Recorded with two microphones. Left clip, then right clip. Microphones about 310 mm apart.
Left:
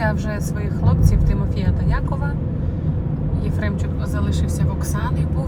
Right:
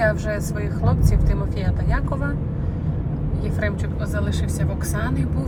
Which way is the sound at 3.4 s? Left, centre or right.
Centre.